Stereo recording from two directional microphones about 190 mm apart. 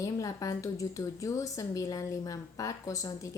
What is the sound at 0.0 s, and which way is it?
A woman's voice, 20° left (ahead or behind).